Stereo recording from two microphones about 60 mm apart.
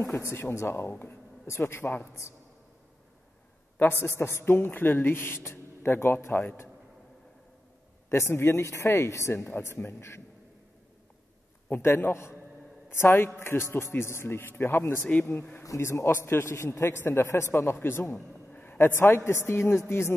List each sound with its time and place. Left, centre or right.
0.0 s speech: left
3.7 s a man's voice: left
8.1 s speech: left
9.8 s speech: left
11.8 s speech: left
15.0 s speech: left
15.8 s speech: left
16.9 s a man's voice: left